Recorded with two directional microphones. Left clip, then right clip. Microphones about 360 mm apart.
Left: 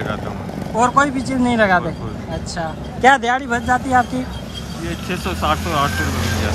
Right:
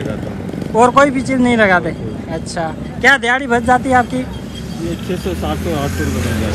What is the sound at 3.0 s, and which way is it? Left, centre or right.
Speech, centre.